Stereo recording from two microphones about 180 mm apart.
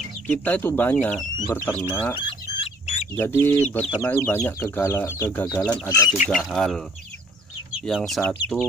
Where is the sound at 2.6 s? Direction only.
35° left (ahead or behind).